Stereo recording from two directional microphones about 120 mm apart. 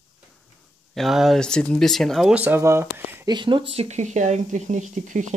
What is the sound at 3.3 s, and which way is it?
Speech, 40° right (ahead or behind).